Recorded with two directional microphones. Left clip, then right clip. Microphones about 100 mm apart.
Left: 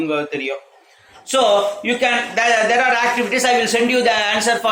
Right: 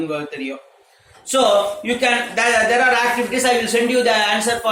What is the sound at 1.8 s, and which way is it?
A man's voice, 20° left (ahead or behind).